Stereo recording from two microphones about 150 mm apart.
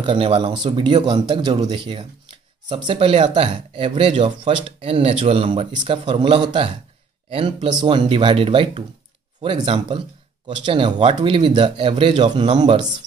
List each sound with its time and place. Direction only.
0.0 s speech: 35° right (ahead or behind)